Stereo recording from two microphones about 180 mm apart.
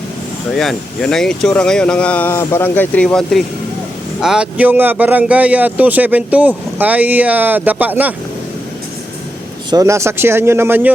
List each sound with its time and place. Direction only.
0.5 s speech: centre (ahead or behind)
9.6 s speech: 20° right (ahead or behind)